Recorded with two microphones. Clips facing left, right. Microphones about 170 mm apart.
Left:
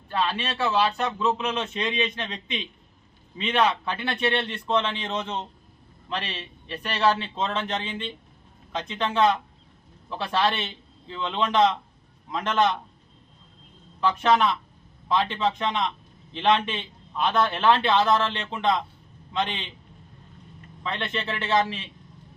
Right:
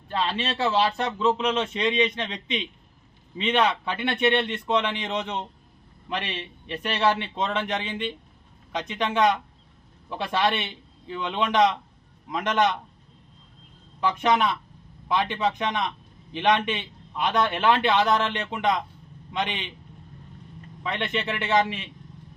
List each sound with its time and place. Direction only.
0.1 s a man's voice: 25° right (ahead or behind)
3.3 s a man's voice: 30° right (ahead or behind)
14.0 s a man's voice: 15° right (ahead or behind)
20.8 s a man's voice: 15° right (ahead or behind)